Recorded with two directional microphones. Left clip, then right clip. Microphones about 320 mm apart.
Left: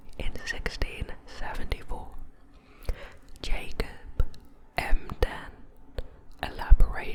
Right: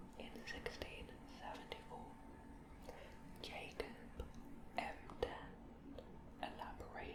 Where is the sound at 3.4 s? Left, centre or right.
Left.